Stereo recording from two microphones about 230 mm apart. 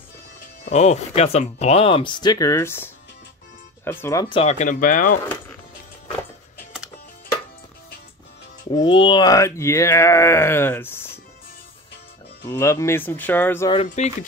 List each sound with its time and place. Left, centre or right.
0.7 s speech: left
8.6 s speech: left
12.4 s speech: centre
13.8 s speech: left